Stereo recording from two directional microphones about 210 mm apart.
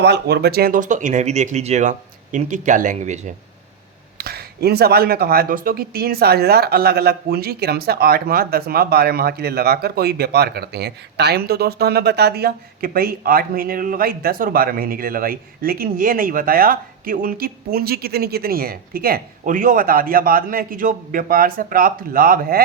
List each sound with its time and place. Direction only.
0.0 s speech: 55° right (ahead or behind); by 3.3 s 35° right (ahead or behind)
4.2 s speech: 45° right (ahead or behind)